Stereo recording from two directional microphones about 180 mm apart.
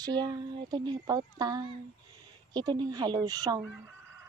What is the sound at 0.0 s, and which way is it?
Speech, 25° right (ahead or behind).